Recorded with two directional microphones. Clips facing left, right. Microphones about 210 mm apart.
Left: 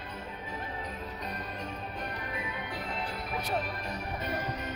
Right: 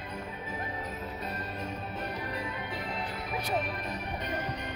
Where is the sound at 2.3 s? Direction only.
Centre (ahead or behind).